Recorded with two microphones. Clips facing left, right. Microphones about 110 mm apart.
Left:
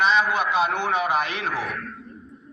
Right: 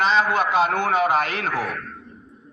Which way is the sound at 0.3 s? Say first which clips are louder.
Right 3 dB; 45° right (ahead or behind).